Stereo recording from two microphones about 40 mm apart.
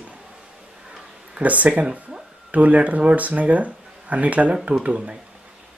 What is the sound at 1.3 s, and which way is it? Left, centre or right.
Speech, right.